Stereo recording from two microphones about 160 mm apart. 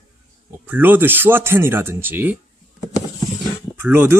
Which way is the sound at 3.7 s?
15° right (ahead or behind).